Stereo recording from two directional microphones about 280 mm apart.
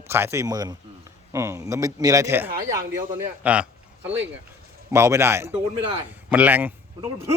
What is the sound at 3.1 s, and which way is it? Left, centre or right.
Speech, centre.